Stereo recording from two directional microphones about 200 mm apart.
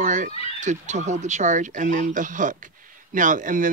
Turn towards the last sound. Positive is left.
turn(degrees=-40)  # may be behind; listen again after turning